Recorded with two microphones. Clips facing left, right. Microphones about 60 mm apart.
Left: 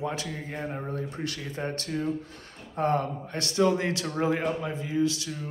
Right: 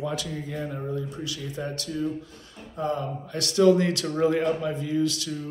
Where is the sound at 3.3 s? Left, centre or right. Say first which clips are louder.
Right 5 dB; left.